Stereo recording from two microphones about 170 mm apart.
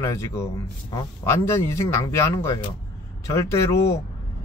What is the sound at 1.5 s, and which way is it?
Speech, 20° left (ahead or behind).